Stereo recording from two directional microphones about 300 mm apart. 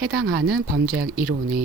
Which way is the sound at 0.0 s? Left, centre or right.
Right.